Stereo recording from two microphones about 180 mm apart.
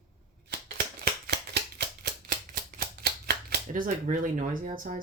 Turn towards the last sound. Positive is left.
turn(degrees=-50)  # may be behind; listen again after turning